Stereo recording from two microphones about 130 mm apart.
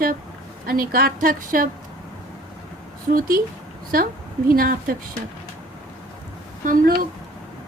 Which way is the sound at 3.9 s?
90° right.